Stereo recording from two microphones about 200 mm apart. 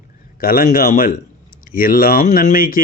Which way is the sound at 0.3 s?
45° left (ahead or behind).